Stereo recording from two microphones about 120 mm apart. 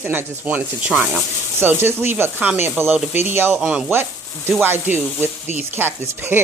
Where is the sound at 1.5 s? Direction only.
20° right (ahead or behind).